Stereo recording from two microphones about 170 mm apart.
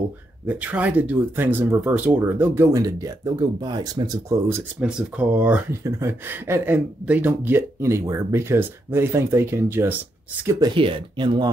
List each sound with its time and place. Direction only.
0.5 s speech: 10° right (ahead or behind)
10.7 s speech: 30° right (ahead or behind)